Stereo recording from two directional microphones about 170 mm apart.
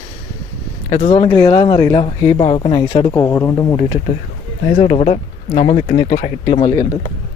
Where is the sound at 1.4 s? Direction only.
25° left (ahead or behind).